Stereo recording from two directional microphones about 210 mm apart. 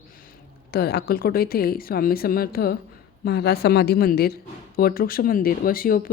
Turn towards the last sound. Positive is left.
turn(degrees=45)  # may be behind; listen again after turning